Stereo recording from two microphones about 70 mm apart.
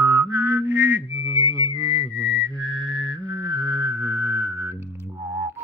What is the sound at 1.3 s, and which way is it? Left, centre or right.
Whistling, right.